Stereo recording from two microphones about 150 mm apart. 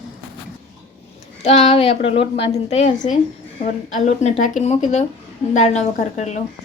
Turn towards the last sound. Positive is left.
turn(degrees=50)  # may be behind; listen again after turning